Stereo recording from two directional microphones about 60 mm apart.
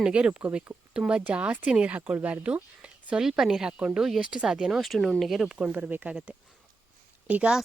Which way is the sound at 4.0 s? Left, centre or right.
Centre.